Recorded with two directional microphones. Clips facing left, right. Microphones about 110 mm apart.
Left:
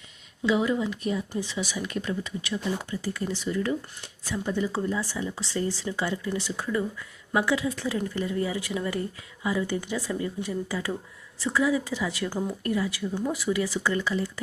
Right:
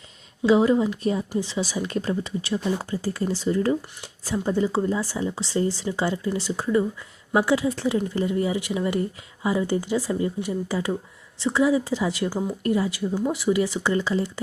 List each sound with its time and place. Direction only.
0.4 s speech: 30° right (ahead or behind)
12.3 s speech: 5° right (ahead or behind)
12.6 s speech: 25° right (ahead or behind)